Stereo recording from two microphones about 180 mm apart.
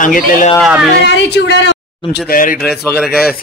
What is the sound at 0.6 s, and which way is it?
Speech, 5° right (ahead or behind).